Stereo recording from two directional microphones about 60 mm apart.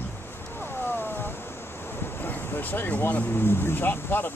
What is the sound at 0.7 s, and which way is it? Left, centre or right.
Wild animals, left.